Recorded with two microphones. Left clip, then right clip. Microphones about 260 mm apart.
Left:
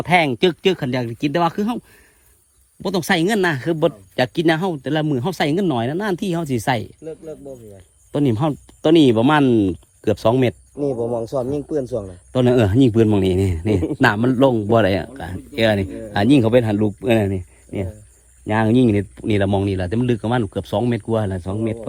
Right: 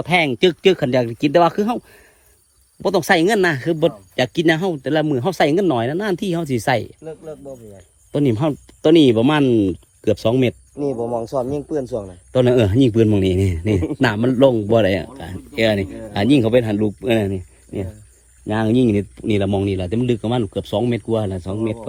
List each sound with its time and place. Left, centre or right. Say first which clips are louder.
0.1 s speech: even; left; by 6.9 s centre
8.1 s speech: right 1 dB; centre
10.8 s speech: left 1 dB; right
12.3 s speech: right 1 dB; centre; by 17.1 s left
18.5 s speech: left 1 dB; left